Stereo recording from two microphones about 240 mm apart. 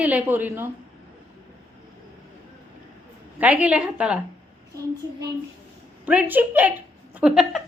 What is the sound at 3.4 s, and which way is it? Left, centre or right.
Speech, centre.